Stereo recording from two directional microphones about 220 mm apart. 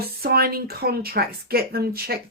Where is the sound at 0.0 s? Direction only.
45° right (ahead or behind).